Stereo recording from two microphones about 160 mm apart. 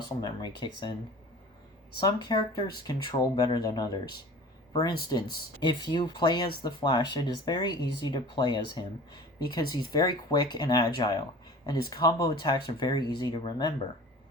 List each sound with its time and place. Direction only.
0.2 s speech: 25° left (ahead or behind)
2.0 s speech: 25° left (ahead or behind)
5.6 s speech: 30° left (ahead or behind)